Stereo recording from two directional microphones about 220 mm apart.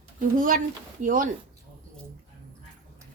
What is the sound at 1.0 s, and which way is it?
Speech, 40° right (ahead or behind).